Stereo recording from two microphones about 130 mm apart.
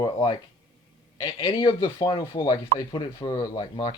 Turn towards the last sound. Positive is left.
turn(degrees=35)  # may be behind; listen again after turning